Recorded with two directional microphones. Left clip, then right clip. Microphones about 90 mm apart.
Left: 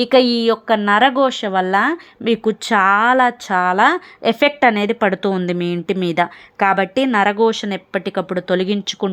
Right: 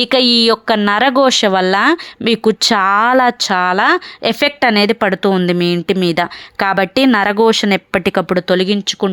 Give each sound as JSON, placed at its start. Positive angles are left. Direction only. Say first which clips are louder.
{"t": 0.0, "sound": "speech", "louder": "right 2 dB", "side_deg": -30}
{"t": 1.7, "sound": "speech", "louder": "right 4 dB", "side_deg": -40}
{"t": 3.0, "sound": "speech", "louder": "right 2 dB", "side_deg": -75}
{"t": 3.4, "sound": "speech", "louder": "right 2 dB", "side_deg": -35}
{"t": 6.7, "sound": "speech", "louder": "right 3 dB", "side_deg": -55}
{"t": 8.4, "sound": "speech", "louder": "right 4 dB", "side_deg": -25}